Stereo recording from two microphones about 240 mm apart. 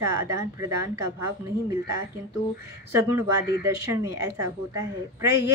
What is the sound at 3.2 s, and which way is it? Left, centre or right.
A woman's voice, centre.